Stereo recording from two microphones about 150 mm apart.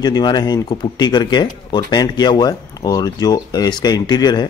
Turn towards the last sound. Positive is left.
turn(degrees=25)  # may be behind; listen again after turning